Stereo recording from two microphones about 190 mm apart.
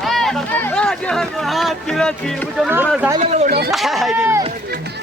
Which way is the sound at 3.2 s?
35° right (ahead or behind).